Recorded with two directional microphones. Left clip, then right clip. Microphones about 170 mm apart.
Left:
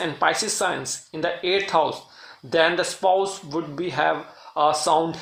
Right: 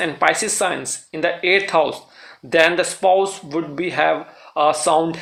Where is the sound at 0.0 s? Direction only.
15° right (ahead or behind).